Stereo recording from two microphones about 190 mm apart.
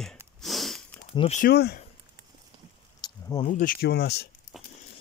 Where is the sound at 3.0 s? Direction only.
20° left (ahead or behind).